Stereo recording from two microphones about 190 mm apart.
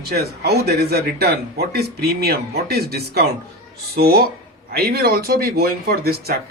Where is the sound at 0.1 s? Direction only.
55° right (ahead or behind).